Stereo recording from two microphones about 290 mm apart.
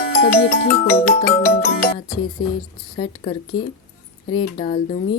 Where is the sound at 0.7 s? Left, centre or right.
Left.